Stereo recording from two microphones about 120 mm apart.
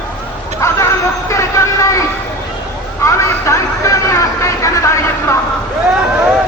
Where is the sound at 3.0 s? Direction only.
25° left (ahead or behind).